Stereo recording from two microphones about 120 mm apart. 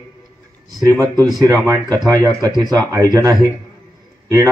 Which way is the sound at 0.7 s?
30° right (ahead or behind).